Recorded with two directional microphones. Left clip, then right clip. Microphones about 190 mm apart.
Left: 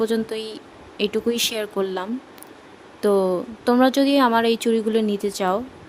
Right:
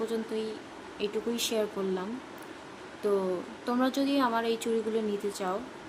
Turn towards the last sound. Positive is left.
turn(degrees=50)  # may be behind; listen again after turning